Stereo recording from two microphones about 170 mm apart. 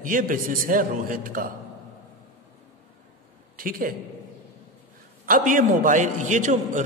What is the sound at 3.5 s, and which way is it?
Speech, 55° right (ahead or behind).